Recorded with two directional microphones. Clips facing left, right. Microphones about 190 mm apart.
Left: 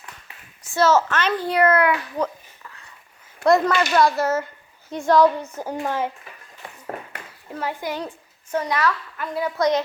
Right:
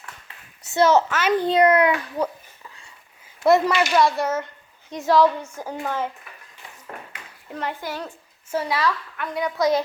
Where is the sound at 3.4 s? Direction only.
5° right (ahead or behind).